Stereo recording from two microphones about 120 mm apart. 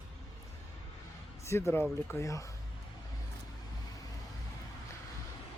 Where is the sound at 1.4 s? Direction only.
20° left (ahead or behind).